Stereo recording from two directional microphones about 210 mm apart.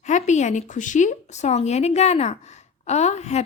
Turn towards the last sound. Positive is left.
turn(degrees=30)  # may be behind; listen again after turning